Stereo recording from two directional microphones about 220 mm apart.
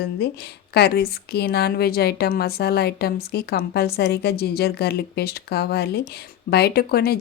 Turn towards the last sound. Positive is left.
turn(degrees=45)  # may be behind; listen again after turning